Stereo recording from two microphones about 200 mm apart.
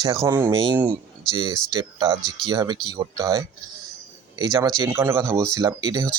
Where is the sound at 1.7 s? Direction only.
20° right (ahead or behind).